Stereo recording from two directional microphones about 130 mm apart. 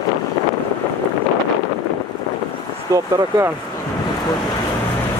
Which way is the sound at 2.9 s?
25° right (ahead or behind).